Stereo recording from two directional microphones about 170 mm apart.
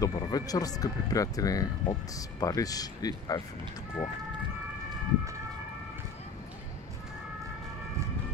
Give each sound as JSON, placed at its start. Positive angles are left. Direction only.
{"t": 0.0, "sound": "speech", "side_deg": 20}